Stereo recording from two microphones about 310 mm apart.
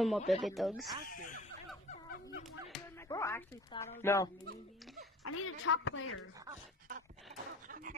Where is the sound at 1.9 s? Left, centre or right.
Left.